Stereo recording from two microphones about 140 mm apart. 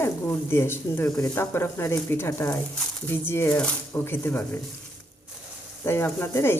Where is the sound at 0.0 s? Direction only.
15° left (ahead or behind).